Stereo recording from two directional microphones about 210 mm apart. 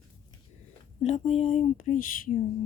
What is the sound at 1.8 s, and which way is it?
Speech, 40° left (ahead or behind).